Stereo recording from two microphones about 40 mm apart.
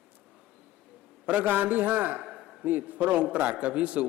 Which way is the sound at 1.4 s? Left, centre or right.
Right.